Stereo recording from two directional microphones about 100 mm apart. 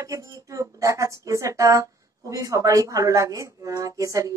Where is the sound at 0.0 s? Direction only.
35° right (ahead or behind).